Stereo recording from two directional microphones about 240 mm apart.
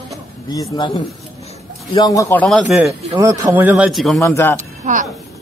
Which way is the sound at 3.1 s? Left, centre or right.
Centre.